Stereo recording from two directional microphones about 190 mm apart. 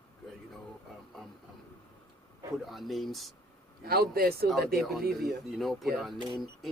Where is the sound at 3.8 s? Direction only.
55° right (ahead or behind).